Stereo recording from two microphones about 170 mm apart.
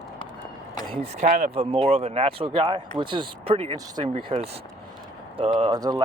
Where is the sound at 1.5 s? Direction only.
35° right (ahead or behind).